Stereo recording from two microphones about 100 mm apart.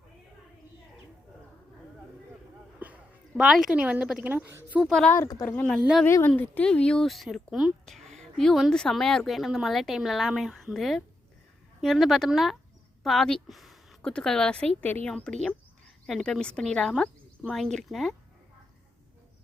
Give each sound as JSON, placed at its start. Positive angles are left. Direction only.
{"t": 2.7, "sound": "a sound", "side_deg": -15}
{"t": 3.5, "sound": "speech", "side_deg": -5}
{"t": 4.9, "sound": "a woman's voice", "side_deg": 5}
{"t": 15.1, "sound": "a woman's voice", "side_deg": 5}